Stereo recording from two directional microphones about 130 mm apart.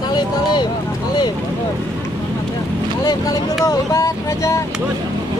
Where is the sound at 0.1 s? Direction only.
35° left (ahead or behind).